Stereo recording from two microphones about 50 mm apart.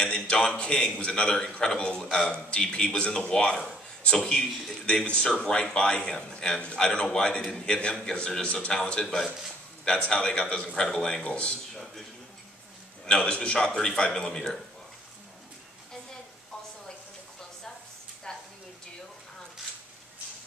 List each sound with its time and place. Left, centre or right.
0.0 s a sound: centre
0.6 s a man's voice: centre
13.0 s speech: centre